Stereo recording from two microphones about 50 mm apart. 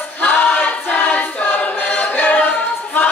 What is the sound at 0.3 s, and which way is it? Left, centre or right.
Choir, left.